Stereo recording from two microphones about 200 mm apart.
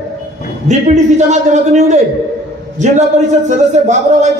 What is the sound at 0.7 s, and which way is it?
A man's voice, 35° right (ahead or behind).